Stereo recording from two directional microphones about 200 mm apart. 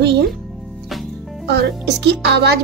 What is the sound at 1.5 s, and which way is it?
A woman's voice, 55° right (ahead or behind).